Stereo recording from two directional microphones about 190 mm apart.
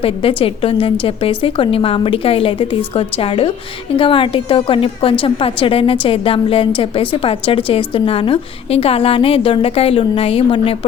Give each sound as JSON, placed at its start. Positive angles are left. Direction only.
{"t": 0.0, "sound": "a woman's voice", "side_deg": 30}